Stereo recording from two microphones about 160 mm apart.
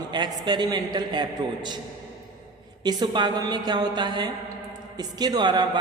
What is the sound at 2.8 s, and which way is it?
A man's voice, 25° right (ahead or behind).